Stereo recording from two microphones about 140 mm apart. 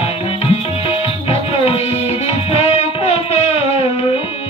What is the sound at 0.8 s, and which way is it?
Music, 40° left (ahead or behind).